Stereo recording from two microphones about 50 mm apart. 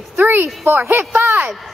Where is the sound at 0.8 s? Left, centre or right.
Right.